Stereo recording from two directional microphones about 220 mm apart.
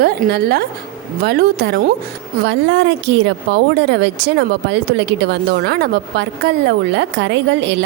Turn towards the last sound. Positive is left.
turn(degrees=-55)  # may be behind; listen again after turning